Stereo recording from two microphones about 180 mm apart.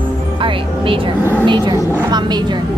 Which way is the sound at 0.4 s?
30° right (ahead or behind).